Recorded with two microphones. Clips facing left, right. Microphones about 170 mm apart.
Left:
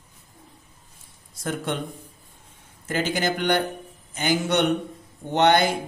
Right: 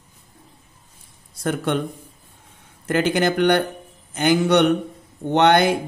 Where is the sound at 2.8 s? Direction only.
65° right (ahead or behind).